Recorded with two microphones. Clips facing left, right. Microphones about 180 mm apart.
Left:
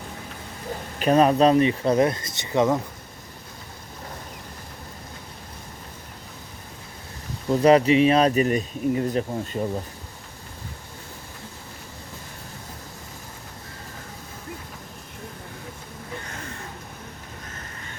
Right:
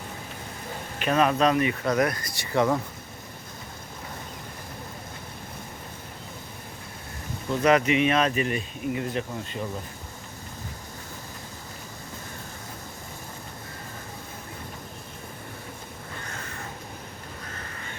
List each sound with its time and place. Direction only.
0.9 s speech: 35° left (ahead or behind); by 2.7 s 20° left (ahead or behind)
7.5 s speech: 30° left (ahead or behind)